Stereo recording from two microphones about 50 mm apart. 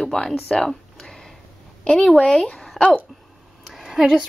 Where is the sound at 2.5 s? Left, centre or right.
Centre.